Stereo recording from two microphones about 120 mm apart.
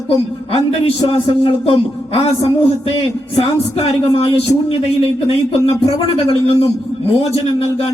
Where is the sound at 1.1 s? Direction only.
55° left (ahead or behind).